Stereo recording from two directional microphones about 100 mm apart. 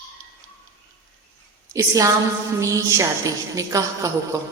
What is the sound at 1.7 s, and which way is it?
A woman's voice, 35° right (ahead or behind).